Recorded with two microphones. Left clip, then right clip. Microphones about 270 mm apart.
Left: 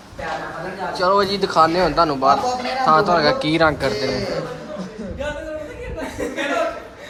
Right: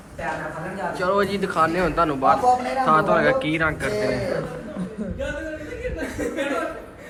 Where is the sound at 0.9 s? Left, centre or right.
Centre.